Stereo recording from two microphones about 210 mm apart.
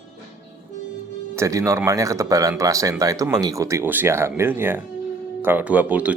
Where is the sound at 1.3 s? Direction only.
15° right (ahead or behind).